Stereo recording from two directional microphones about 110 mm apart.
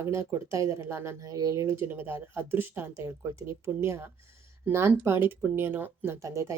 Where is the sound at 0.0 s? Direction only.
25° right (ahead or behind).